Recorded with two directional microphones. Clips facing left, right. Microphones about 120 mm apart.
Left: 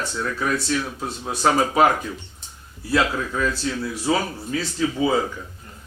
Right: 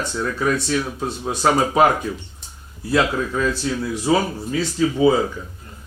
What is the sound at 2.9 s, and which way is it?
Speech, 15° right (ahead or behind).